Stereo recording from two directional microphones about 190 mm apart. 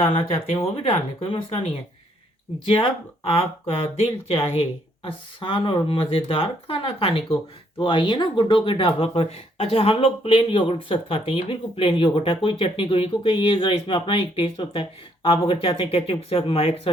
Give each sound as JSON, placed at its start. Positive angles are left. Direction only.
{"t": 0.0, "sound": "speech", "side_deg": 30}
{"t": 3.2, "sound": "speech", "side_deg": 30}